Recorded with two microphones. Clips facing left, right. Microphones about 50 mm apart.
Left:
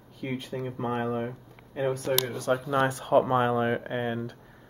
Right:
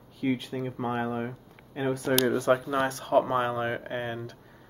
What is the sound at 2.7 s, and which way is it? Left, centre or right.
Speech, centre.